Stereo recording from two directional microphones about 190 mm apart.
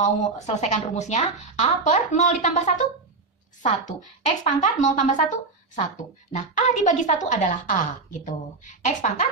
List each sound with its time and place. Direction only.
0.0 s a woman's voice: 35° left (ahead or behind)
4.4 s a woman's voice: 40° left (ahead or behind)
6.3 s a woman's voice: 40° left (ahead or behind)